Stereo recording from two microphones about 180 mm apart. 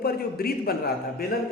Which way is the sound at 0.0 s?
60° left (ahead or behind).